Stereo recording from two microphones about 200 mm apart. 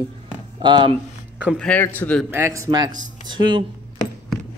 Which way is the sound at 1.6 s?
10° left (ahead or behind).